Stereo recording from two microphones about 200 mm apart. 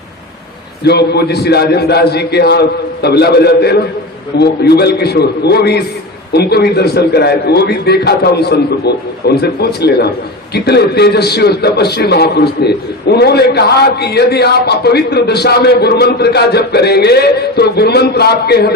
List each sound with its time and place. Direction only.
0.9 s a man's voice: 55° left (ahead or behind)